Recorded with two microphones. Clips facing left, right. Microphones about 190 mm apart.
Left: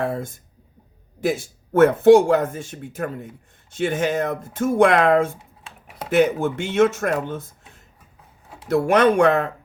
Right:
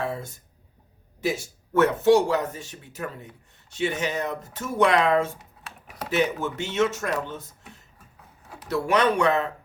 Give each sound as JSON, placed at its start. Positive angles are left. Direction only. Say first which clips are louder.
{"t": 0.0, "sound": "speech", "louder": "left 5 dB", "side_deg": 50}
{"t": 5.4, "sound": "computer keyboard", "louder": "even", "side_deg": 25}
{"t": 6.1, "sound": "speech", "louder": "left 7 dB", "side_deg": 50}
{"t": 8.7, "sound": "speech", "louder": "left 6 dB", "side_deg": 50}